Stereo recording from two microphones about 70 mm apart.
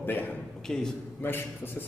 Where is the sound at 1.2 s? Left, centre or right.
Left.